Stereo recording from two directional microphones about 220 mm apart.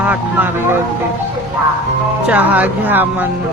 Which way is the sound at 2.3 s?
5° right (ahead or behind).